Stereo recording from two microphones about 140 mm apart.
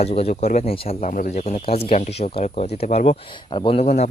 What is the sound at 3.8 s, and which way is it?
Speech, 55° left (ahead or behind).